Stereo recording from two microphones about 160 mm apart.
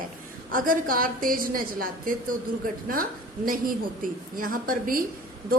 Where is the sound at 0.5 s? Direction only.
60° right (ahead or behind).